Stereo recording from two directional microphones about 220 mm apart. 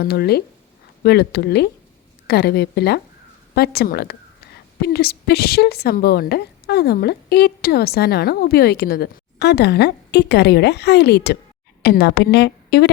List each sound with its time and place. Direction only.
0.0 s a woman's voice: 45° left (ahead or behind)